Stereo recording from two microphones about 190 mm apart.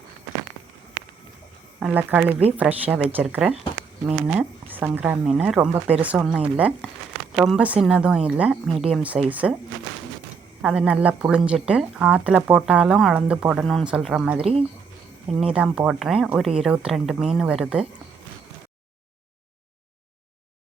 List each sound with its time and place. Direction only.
1.8 s speech: 10° right (ahead or behind)
10.6 s speech: 5° right (ahead or behind)